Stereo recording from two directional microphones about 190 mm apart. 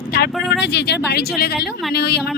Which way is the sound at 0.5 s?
60° left (ahead or behind).